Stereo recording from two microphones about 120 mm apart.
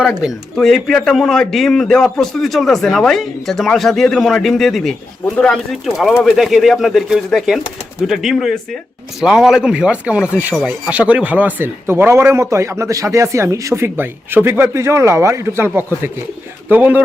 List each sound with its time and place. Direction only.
0.2 s a man's voice: centre (ahead or behind)